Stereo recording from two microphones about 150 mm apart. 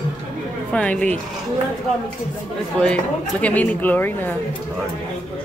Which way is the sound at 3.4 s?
10° left (ahead or behind).